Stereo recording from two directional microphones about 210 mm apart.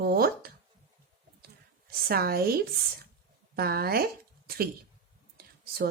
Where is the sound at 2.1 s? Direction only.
45° right (ahead or behind).